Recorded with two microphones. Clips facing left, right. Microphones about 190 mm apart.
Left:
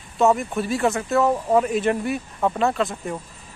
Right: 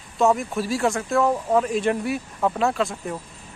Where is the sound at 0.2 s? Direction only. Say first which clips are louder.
Left 1 dB; centre (ahead or behind).